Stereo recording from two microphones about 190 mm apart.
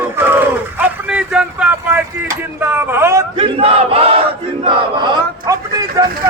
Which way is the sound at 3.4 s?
30° right (ahead or behind).